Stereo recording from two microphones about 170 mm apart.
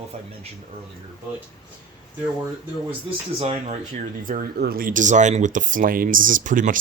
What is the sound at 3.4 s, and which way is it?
Speech, 35° right (ahead or behind).